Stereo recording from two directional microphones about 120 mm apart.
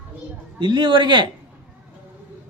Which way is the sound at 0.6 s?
40° right (ahead or behind).